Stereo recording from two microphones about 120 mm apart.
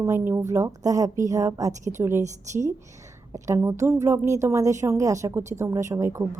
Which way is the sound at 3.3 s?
25° right (ahead or behind).